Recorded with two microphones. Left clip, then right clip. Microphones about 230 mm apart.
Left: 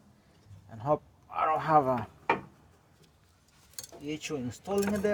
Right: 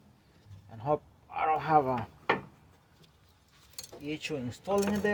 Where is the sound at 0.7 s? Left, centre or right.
Left.